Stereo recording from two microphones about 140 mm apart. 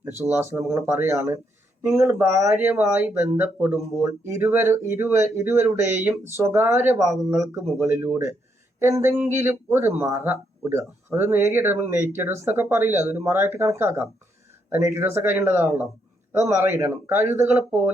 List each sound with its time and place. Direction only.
0.0 s a man's voice: 15° right (ahead or behind)